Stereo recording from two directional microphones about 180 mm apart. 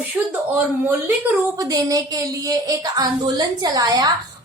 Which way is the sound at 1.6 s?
20° right (ahead or behind).